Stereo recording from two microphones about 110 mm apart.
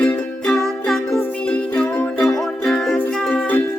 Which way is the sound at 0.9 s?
5° left (ahead or behind).